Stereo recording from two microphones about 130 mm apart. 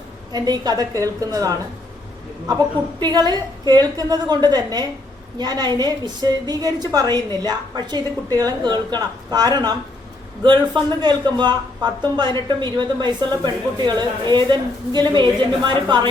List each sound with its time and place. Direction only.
0.3 s a woman's voice: 30° right (ahead or behind)
3.0 s speech: 30° right (ahead or behind)